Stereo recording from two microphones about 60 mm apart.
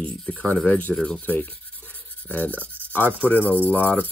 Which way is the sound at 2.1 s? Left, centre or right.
Left.